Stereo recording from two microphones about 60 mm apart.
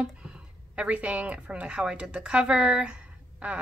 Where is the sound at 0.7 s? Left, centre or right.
Right.